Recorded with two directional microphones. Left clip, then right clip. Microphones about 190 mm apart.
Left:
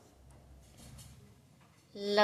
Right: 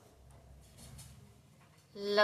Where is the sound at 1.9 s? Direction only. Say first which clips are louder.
Left 1 dB; 20° left (ahead or behind).